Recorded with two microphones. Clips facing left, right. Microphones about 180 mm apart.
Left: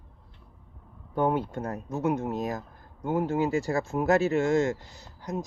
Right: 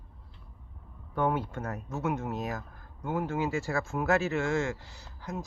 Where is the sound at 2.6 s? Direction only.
20° left (ahead or behind).